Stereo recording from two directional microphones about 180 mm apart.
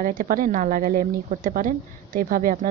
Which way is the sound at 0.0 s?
50° right (ahead or behind).